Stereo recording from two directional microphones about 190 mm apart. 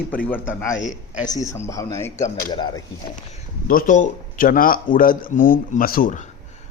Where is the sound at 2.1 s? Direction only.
40° left (ahead or behind).